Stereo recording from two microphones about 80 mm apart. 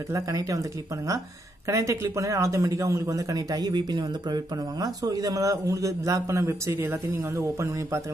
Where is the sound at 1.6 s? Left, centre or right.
Right.